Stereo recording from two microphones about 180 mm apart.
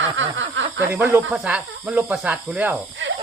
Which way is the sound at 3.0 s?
90° right.